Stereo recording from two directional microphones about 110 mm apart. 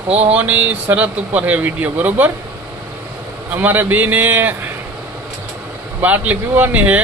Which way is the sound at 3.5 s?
15° right (ahead or behind).